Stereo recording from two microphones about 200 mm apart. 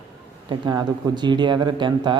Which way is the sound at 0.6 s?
20° right (ahead or behind).